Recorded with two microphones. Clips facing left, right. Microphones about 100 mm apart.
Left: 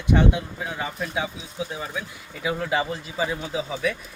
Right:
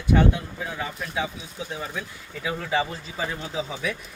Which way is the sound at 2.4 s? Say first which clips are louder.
Left 1 dB; 10° left (ahead or behind).